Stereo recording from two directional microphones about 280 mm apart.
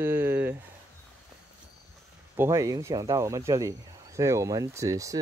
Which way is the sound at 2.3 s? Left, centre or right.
Centre.